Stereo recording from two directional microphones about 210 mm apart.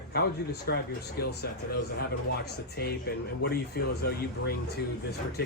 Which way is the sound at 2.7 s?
50° left (ahead or behind).